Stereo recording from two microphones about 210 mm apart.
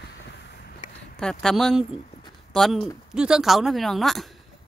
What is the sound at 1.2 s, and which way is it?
Speech, 5° left (ahead or behind).